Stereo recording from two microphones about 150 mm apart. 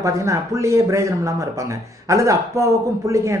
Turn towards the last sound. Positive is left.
turn(degrees=-20)  # may be behind; listen again after turning